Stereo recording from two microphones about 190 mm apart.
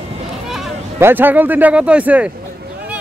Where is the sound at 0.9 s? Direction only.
10° right (ahead or behind).